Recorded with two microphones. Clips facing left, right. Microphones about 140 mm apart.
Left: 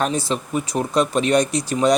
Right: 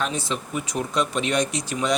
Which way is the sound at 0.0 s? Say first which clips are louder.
Left 5 dB; 35° left (ahead or behind).